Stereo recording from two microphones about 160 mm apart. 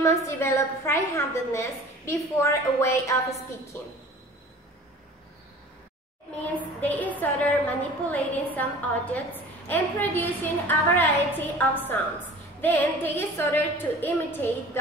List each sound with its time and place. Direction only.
0.0 s a woman's voice: 20° left (ahead or behind)
6.4 s a woman's voice: 10° left (ahead or behind)